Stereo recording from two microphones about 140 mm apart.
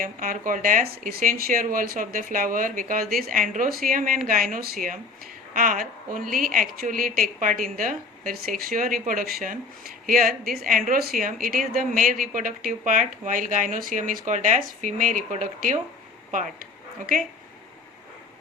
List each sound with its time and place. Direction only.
0.0 s a woman's voice: 75° right (ahead or behind)
5.5 s a woman's voice: 75° right (ahead or behind)